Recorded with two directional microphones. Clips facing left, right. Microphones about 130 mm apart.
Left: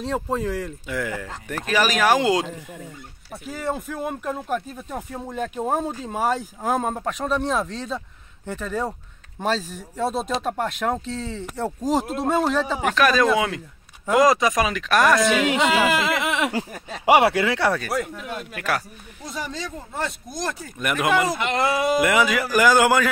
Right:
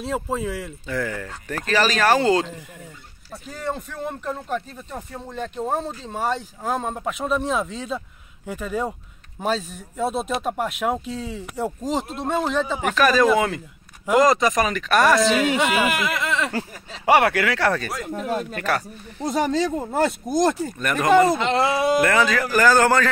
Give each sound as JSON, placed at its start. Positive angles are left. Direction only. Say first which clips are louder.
{"t": 0.0, "sound": "speech", "louder": "left 1 dB", "side_deg": -5}
{"t": 0.8, "sound": "speech", "louder": "right 5 dB", "side_deg": 10}
{"t": 11.8, "sound": "speech", "louder": "left 3 dB", "side_deg": 5}
{"t": 15.4, "sound": "speech", "louder": "left 1 dB", "side_deg": 20}
{"t": 17.7, "sound": "speech", "louder": "left 3 dB", "side_deg": 5}
{"t": 18.1, "sound": "speech", "louder": "right 7 dB", "side_deg": -40}
{"t": 18.5, "sound": "speech", "louder": "right 2 dB", "side_deg": 5}
{"t": 19.3, "sound": "speech", "louder": "right 10 dB", "side_deg": -60}
{"t": 20.8, "sound": "speech", "louder": "right 4 dB", "side_deg": 5}
{"t": 21.3, "sound": "speech", "louder": "right 2 dB", "side_deg": -20}
{"t": 22.0, "sound": "speech", "louder": "even", "side_deg": 15}